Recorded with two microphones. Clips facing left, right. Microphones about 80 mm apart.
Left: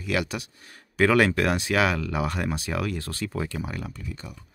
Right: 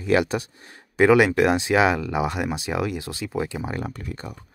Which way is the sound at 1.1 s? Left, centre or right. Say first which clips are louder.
Right 5 dB; centre.